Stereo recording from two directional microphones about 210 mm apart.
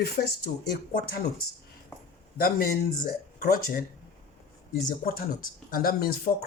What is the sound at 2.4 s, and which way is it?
Speech, 45° left (ahead or behind).